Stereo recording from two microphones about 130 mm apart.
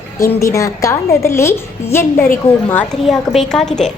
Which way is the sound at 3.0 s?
Centre (ahead or behind).